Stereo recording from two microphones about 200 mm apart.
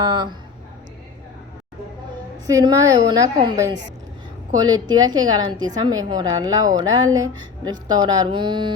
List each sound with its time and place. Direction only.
0.0 s a woman's voice: 20° right (ahead or behind)
2.5 s a woman's voice: 20° right (ahead or behind)